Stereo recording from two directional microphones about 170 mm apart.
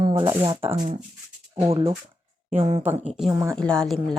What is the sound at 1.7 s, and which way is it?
Speech, 30° right (ahead or behind).